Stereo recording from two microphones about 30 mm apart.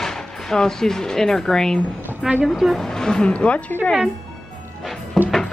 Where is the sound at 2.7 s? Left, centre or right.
Centre.